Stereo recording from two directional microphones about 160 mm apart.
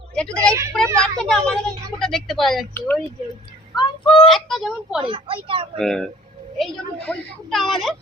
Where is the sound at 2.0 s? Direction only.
Centre (ahead or behind).